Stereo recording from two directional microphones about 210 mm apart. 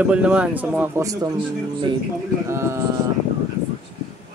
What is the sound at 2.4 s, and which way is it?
Speech, 15° right (ahead or behind).